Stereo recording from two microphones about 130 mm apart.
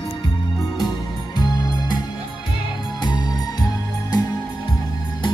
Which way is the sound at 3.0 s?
35° left (ahead or behind).